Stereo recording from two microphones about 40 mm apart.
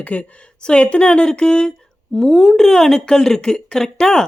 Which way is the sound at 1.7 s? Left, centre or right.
Centre.